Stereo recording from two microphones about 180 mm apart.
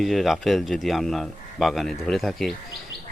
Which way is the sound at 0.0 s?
Centre (ahead or behind).